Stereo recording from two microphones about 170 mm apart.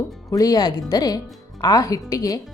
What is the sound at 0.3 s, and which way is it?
Speech, 20° left (ahead or behind).